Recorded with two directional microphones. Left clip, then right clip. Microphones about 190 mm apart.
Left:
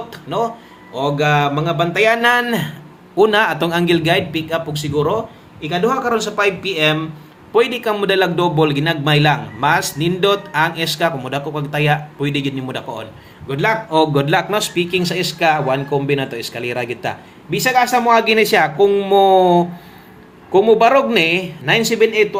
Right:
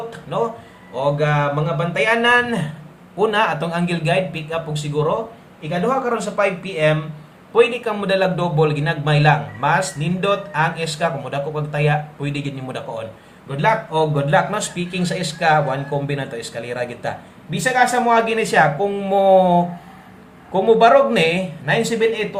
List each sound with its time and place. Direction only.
0.1 s a sound: 25° left (ahead or behind)
0.9 s a man's voice: 35° left (ahead or behind)
7.5 s a man's voice: 35° left (ahead or behind)